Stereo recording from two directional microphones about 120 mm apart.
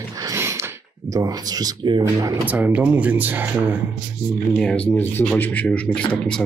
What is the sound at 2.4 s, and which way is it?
Speech, 15° right (ahead or behind).